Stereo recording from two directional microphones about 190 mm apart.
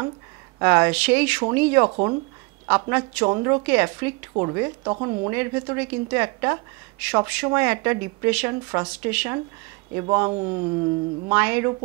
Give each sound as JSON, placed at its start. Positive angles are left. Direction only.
{"t": 0.6, "sound": "a woman's voice", "side_deg": -15}
{"t": 1.9, "sound": "speech", "side_deg": -25}
{"t": 2.9, "sound": "a woman's voice", "side_deg": -10}
{"t": 3.3, "sound": "speech", "side_deg": -25}
{"t": 3.6, "sound": "a woman's voice", "side_deg": -10}
{"t": 4.3, "sound": "speech", "side_deg": -25}
{"t": 5.3, "sound": "a woman's voice", "side_deg": -10}
{"t": 11.2, "sound": "a woman's voice", "side_deg": -10}